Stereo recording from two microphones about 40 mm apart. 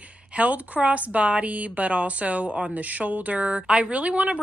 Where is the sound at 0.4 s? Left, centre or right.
Right.